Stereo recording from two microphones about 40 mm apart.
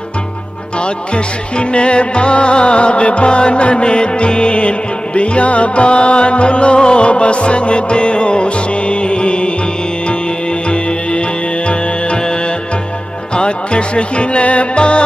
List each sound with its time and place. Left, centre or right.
0.7 s music: left
10.7 s music: left